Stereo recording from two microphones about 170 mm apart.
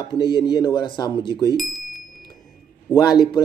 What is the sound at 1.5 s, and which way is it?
Bicycle bell, centre (ahead or behind).